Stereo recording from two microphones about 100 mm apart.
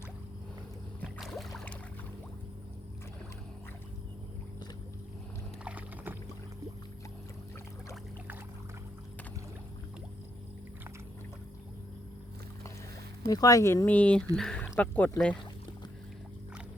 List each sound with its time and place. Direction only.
1.2 s boat: centre (ahead or behind)
5.6 s rowboat: 15° right (ahead or behind)
13.2 s speech: 40° left (ahead or behind)
13.8 s speech: 15° left (ahead or behind)